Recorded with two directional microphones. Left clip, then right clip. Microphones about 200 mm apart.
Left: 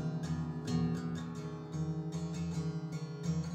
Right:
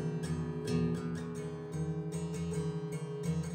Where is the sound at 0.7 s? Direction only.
40° right (ahead or behind).